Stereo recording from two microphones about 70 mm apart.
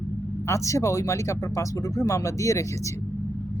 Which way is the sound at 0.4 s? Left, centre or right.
Left.